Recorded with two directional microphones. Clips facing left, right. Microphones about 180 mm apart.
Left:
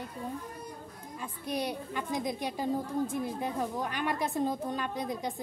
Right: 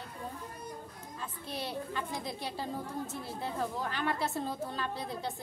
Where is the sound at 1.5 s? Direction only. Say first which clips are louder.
Left 4 dB; 15° left (ahead or behind).